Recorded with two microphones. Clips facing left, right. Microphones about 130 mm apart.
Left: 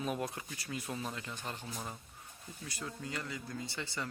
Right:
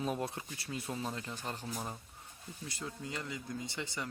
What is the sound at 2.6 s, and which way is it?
Speech, 25° right (ahead or behind).